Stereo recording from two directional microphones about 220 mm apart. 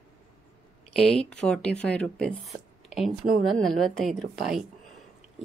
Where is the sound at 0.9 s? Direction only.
Centre (ahead or behind).